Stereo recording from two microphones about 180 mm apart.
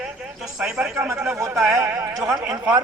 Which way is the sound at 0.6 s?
5° right (ahead or behind).